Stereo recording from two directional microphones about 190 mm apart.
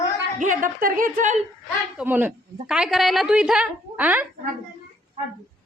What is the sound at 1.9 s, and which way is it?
A woman's voice, 10° right (ahead or behind).